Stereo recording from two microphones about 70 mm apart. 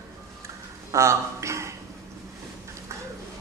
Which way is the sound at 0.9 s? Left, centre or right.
Right.